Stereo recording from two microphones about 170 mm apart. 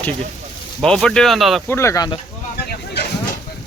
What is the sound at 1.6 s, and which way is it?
Speech, 15° left (ahead or behind).